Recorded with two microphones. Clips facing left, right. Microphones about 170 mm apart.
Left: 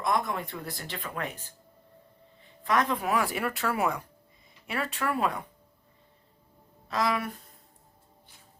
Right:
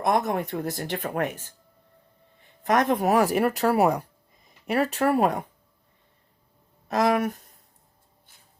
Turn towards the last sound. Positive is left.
turn(degrees=-45)  # may be behind; listen again after turning